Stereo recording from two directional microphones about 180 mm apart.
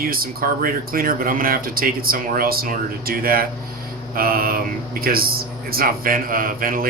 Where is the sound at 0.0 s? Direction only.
55° right (ahead or behind).